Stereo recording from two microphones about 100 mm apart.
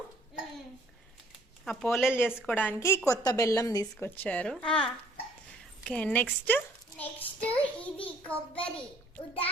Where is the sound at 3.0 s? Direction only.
35° left (ahead or behind).